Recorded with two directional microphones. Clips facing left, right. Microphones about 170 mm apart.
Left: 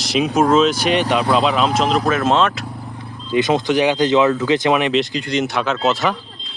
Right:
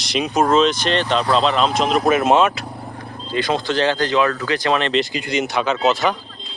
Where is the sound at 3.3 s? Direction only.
20° left (ahead or behind).